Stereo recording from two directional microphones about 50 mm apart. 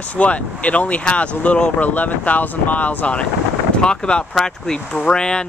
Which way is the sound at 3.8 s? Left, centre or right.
Centre.